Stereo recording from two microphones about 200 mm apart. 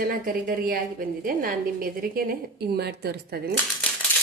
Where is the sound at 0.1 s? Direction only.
45° right (ahead or behind).